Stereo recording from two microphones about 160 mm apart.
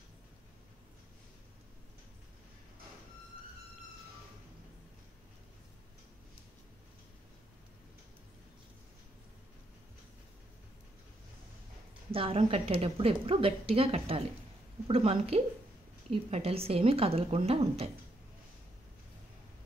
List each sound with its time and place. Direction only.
12.1 s a woman's voice: 35° right (ahead or behind)